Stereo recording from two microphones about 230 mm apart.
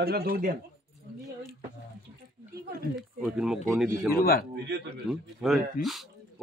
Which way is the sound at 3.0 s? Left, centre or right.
Centre.